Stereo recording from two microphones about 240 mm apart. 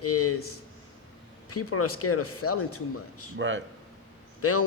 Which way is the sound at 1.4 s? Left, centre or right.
Left.